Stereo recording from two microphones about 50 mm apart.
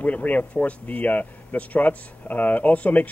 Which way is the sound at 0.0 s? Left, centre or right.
Left.